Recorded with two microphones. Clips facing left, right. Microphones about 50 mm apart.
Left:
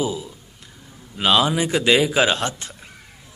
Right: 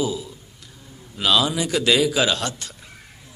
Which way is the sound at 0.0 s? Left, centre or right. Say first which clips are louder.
Even; left.